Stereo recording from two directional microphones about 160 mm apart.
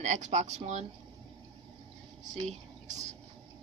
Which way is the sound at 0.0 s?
45° right (ahead or behind).